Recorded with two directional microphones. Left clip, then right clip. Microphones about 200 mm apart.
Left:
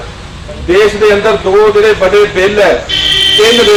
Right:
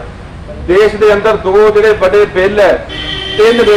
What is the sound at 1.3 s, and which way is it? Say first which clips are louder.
Speech: even; 25° left (ahead or behind).